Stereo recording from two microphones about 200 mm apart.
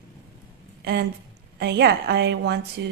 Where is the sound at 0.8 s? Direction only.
55° right (ahead or behind).